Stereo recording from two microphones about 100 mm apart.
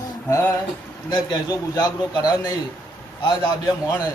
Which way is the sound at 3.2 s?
45° left (ahead or behind).